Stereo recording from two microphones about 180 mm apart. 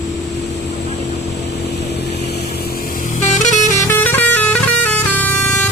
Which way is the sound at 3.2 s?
40° left (ahead or behind).